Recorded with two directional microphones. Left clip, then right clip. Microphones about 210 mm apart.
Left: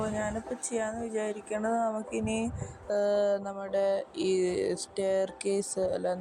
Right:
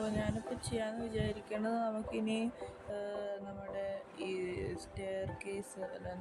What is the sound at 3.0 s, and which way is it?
Mantra, 30° left (ahead or behind).